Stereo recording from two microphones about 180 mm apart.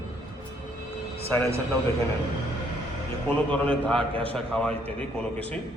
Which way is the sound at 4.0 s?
30° right (ahead or behind).